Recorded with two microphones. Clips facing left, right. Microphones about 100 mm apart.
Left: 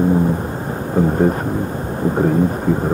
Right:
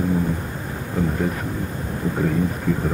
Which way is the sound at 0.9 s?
40° left (ahead or behind).